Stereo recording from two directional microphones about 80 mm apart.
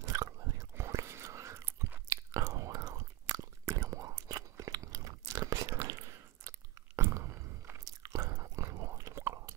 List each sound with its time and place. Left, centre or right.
0.1 s chewing: right
0.7 s whispering: right
2.3 s whispering: right
7.0 s chewing: right